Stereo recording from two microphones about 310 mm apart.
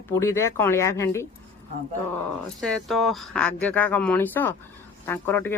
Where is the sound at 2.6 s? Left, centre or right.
Centre.